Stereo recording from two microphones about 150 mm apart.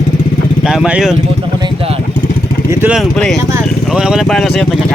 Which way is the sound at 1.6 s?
40° right (ahead or behind).